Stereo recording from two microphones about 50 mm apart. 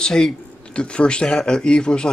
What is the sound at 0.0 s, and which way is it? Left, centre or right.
Speech, centre.